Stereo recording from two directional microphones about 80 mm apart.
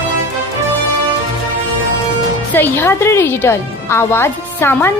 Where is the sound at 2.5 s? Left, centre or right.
Left.